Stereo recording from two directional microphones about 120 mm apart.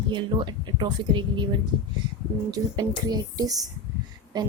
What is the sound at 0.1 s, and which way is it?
A woman's voice, 40° right (ahead or behind).